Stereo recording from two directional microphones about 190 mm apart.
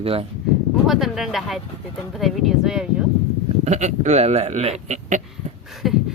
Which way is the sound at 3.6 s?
35° right (ahead or behind).